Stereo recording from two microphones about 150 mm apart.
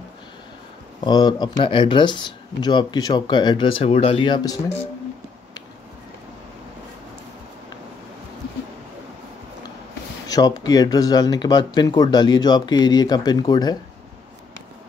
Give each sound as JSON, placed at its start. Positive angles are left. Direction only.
{"t": 1.0, "sound": "speech", "side_deg": 30}
{"t": 10.2, "sound": "speech", "side_deg": 25}